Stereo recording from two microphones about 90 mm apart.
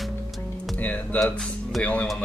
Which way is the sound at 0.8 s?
15° left (ahead or behind).